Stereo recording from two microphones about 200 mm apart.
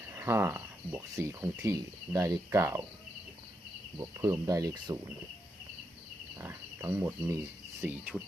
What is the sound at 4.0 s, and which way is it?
Speech, 15° right (ahead or behind).